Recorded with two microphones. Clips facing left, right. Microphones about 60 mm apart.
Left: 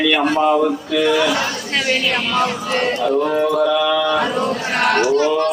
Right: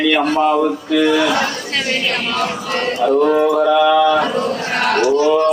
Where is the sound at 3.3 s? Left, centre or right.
Centre.